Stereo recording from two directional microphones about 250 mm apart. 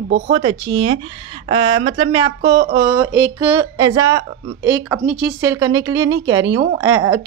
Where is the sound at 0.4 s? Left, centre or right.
Centre.